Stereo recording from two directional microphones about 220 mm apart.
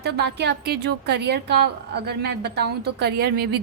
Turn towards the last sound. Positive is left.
turn(degrees=-45)  # may be behind; listen again after turning